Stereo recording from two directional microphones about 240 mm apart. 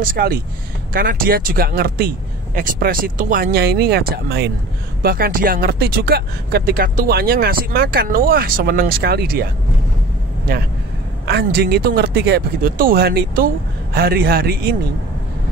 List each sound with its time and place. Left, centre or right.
0.0 s speech: right
11.2 s speech: right